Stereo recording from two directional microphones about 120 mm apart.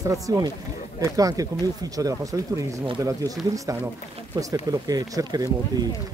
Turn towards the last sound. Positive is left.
turn(degrees=-35)  # may be behind; listen again after turning